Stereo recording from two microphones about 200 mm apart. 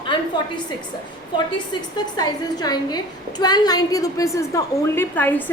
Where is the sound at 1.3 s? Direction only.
20° left (ahead or behind).